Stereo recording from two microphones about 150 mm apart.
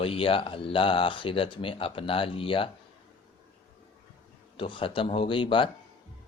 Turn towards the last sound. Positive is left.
turn(degrees=35)  # may be behind; listen again after turning